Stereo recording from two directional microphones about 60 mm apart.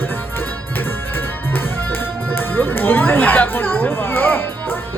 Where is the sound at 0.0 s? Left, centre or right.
Left.